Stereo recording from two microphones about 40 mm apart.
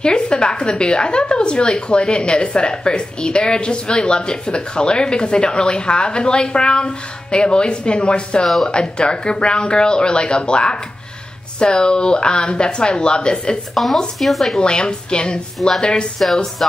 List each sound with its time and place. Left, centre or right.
0.0 s a woman's voice: left
14.2 s speech: centre
14.6 s a woman's voice: left